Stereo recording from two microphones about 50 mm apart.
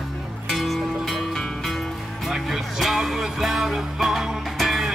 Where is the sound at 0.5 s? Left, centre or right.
Centre.